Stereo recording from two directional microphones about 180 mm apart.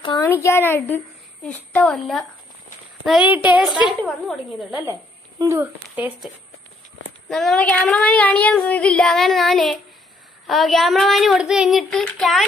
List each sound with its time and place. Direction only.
0.3 s speech: 15° left (ahead or behind)
3.1 s speech: 10° right (ahead or behind)
5.4 s speech: 15° right (ahead or behind)
7.2 s speech: centre (ahead or behind)